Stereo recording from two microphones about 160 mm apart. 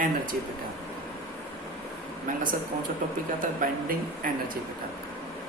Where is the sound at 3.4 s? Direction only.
55° right (ahead or behind).